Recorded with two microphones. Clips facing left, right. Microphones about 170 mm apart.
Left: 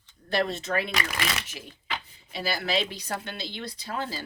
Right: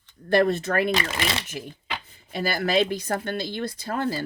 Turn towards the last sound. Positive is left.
turn(degrees=-50)  # may be behind; listen again after turning